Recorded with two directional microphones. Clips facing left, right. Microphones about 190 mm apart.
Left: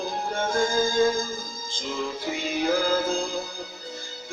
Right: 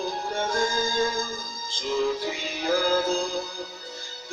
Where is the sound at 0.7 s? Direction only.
55° left (ahead or behind).